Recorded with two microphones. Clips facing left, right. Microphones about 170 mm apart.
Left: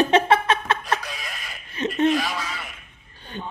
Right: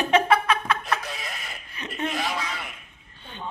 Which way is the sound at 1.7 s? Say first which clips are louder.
Left 10 dB; 25° left (ahead or behind).